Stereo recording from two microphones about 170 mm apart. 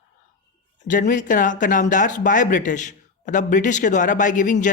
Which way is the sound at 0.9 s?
50° left (ahead or behind).